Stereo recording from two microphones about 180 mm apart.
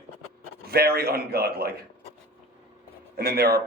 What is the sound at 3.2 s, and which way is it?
Speech, 60° right (ahead or behind).